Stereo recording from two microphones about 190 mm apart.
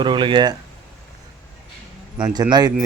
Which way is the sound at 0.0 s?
25° right (ahead or behind).